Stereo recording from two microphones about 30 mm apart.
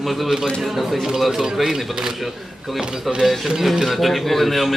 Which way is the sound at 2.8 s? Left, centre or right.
Right.